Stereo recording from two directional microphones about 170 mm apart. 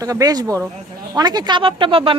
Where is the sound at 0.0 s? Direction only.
20° right (ahead or behind).